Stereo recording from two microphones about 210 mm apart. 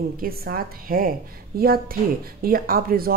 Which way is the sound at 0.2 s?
45° right (ahead or behind).